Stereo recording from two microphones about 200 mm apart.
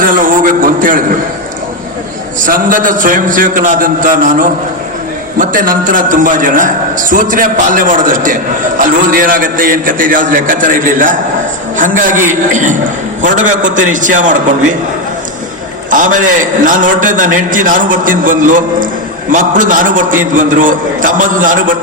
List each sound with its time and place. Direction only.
0.0 s a sound: 45° right (ahead or behind)
2.4 s a man's voice: 45° right (ahead or behind)
15.9 s a man's voice: 40° right (ahead or behind)